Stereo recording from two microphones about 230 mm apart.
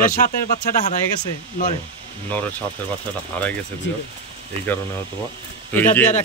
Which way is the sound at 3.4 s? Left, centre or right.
Centre.